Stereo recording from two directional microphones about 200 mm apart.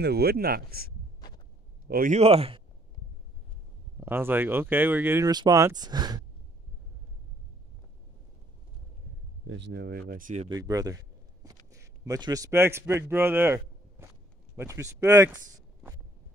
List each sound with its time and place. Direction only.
0.0 s speech: 50° right (ahead or behind)
2.1 s speech: 30° right (ahead or behind)
4.0 s speech: 10° right (ahead or behind)
9.5 s speech: 55° right (ahead or behind); by 10.5 s 35° right (ahead or behind)
10.5 s a man's voice: 20° right (ahead or behind)